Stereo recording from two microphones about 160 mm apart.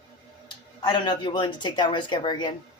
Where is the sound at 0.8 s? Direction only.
30° left (ahead or behind).